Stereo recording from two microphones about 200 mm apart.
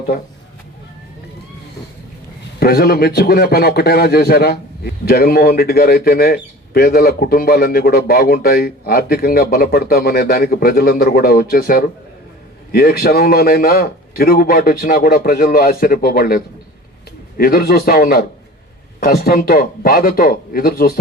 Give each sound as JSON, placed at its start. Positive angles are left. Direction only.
{"t": 2.6, "sound": "a man's voice", "side_deg": 50}